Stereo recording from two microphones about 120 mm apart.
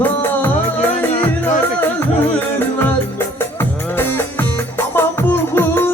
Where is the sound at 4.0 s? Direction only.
20° left (ahead or behind).